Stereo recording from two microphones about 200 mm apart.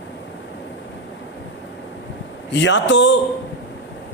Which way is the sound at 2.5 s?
60° left (ahead or behind).